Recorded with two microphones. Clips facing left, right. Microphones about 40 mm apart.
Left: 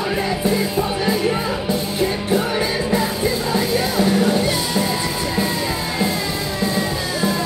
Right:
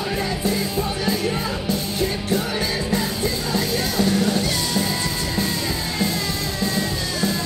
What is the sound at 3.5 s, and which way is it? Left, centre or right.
Music, centre.